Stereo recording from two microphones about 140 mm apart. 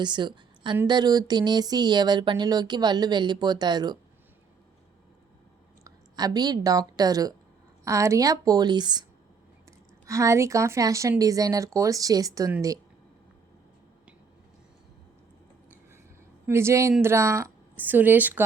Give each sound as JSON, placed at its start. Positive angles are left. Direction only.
{"t": 0.0, "sound": "a woman's voice", "side_deg": -35}
{"t": 0.9, "sound": "a sound", "side_deg": -30}
{"t": 5.8, "sound": "a woman's voice", "side_deg": -30}
{"t": 10.1, "sound": "speech", "side_deg": -20}
{"t": 16.5, "sound": "speech", "side_deg": -20}